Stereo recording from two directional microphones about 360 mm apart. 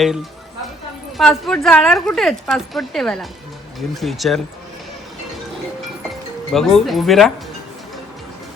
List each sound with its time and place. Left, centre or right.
1.1 s a woman's voice: centre
6.5 s a woman's voice: centre